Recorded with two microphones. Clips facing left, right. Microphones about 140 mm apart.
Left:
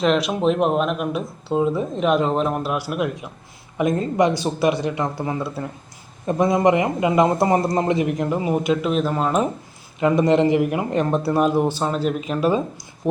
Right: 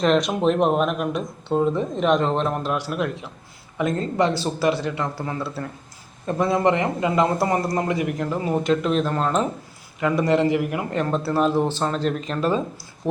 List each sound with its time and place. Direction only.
0.0 s a man's voice: 5° left (ahead or behind)
10.0 s a man's voice: 20° left (ahead or behind)